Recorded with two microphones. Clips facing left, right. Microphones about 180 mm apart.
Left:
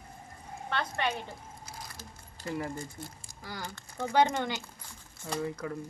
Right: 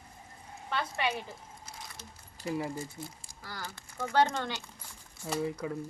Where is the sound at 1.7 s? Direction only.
Centre (ahead or behind).